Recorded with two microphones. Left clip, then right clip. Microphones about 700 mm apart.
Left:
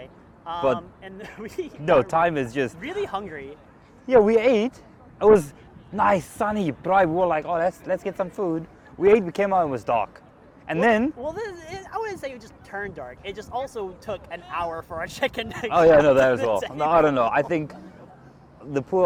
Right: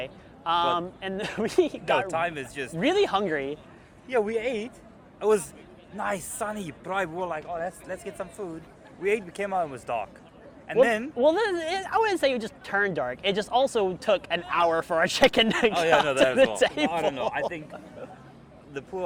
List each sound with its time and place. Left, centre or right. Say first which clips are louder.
0.0 s a man's voice: right 6 dB; right
2.0 s speech: left 7 dB; left
2.8 s speech: right 6 dB; right
4.1 s speech: left 10 dB; left
6.0 s speech: left 9 dB; left
11.2 s speech: right 9 dB; right
15.7 s speech: left 7 dB; left
16.6 s speech: right 1 dB; right
16.9 s speech: left 8 dB; left
18.7 s speech: left 12 dB; left